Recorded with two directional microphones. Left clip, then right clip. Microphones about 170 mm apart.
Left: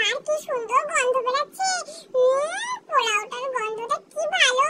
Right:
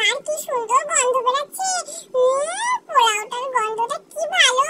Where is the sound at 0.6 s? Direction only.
5° left (ahead or behind).